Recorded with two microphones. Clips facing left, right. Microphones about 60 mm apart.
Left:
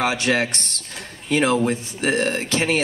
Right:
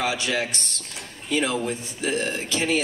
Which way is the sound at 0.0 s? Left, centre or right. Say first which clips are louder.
Left 5 dB; left.